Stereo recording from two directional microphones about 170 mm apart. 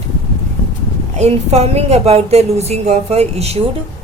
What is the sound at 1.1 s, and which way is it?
A woman's voice, 40° right (ahead or behind).